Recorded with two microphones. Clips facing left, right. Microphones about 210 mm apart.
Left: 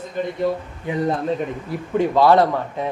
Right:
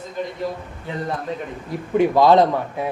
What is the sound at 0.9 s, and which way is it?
Speech, 15° left (ahead or behind).